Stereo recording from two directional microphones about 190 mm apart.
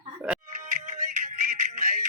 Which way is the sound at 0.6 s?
45° right (ahead or behind).